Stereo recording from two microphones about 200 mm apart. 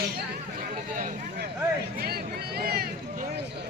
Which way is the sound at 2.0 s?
50° right (ahead or behind).